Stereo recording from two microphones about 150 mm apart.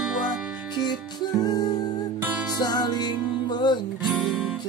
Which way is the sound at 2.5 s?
25° left (ahead or behind).